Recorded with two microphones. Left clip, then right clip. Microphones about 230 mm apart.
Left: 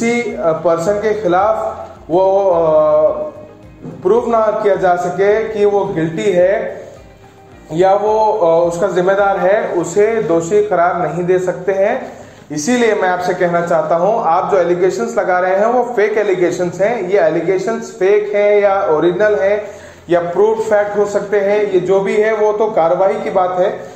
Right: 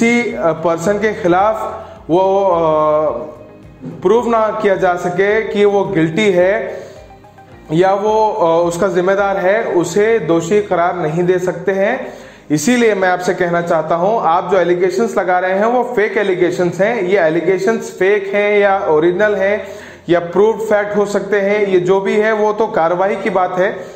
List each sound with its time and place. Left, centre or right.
0.0 s a man's voice: right
4.0 s a man's voice: right
7.7 s a man's voice: right